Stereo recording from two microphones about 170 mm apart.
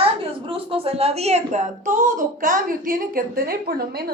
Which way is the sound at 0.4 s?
30° right (ahead or behind).